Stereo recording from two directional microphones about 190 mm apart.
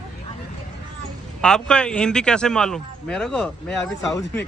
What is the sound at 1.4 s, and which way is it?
Speech, 5° left (ahead or behind).